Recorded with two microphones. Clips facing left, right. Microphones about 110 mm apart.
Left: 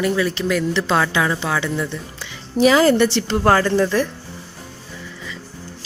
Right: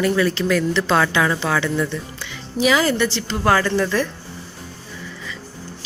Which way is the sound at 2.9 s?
55° left (ahead or behind).